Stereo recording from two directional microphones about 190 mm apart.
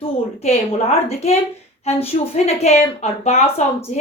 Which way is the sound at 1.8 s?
35° left (ahead or behind).